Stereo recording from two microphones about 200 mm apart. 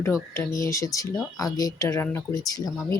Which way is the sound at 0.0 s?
15° left (ahead or behind).